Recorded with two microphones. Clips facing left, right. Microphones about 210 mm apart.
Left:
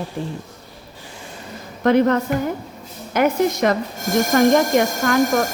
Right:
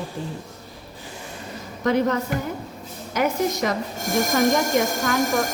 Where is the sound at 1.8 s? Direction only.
55° left (ahead or behind).